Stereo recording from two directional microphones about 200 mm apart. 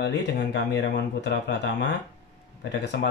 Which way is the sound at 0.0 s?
60° left (ahead or behind).